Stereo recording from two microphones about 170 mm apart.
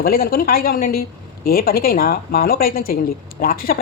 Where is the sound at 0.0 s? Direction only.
60° left (ahead or behind).